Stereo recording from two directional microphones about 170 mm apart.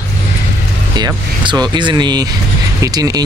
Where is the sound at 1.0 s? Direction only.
25° right (ahead or behind).